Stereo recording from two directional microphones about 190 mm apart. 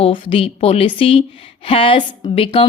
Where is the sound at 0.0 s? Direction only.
30° left (ahead or behind).